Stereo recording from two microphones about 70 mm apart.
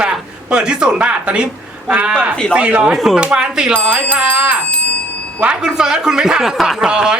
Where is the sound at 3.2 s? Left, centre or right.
Centre.